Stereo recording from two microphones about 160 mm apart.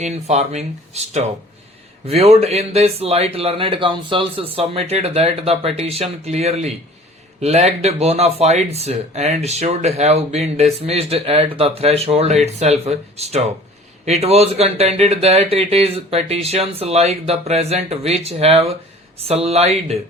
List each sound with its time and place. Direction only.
0.0 s speech: 45° right (ahead or behind)